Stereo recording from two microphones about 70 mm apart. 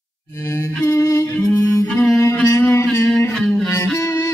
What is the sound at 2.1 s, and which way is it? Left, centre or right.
Mantra, left.